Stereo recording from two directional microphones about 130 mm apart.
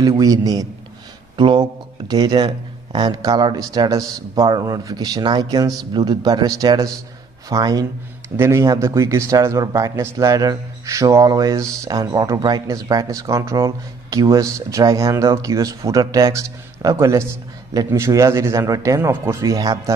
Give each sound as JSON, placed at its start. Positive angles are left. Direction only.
{"t": 0.2, "sound": "a man's voice", "side_deg": -30}